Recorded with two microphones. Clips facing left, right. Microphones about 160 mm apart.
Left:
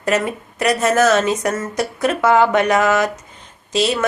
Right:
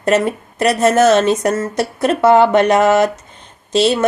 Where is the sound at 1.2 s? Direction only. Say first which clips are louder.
Right 4 dB; 30° right (ahead or behind).